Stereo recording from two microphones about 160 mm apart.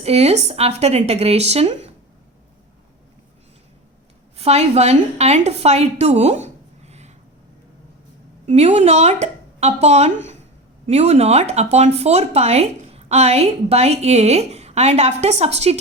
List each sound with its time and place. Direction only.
0.0 s speech: 40° right (ahead or behind)
4.4 s a woman's voice: 40° right (ahead or behind)
8.4 s a woman's voice: 45° right (ahead or behind)